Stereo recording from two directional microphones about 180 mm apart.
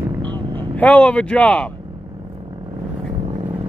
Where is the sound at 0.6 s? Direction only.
10° left (ahead or behind).